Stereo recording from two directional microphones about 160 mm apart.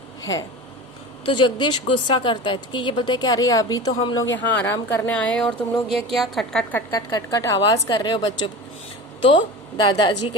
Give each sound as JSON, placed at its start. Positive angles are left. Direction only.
{"t": 0.2, "sound": "speech", "side_deg": 20}
{"t": 1.2, "sound": "a woman's voice", "side_deg": 30}
{"t": 3.9, "sound": "a woman's voice", "side_deg": 30}
{"t": 4.4, "sound": "a woman's voice", "side_deg": 10}
{"t": 9.3, "sound": "a woman's voice", "side_deg": 25}